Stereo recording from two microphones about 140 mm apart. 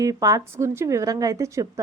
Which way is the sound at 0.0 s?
25° right (ahead or behind).